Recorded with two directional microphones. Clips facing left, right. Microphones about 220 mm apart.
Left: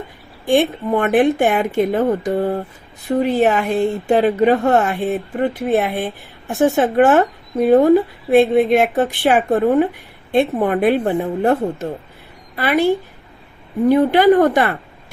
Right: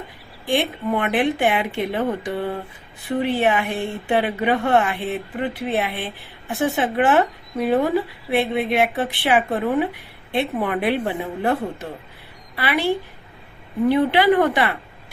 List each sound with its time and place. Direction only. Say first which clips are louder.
0.4 s speech: left 6 dB; 50° left (ahead or behind)
8.3 s speech: left 9 dB; 45° left (ahead or behind)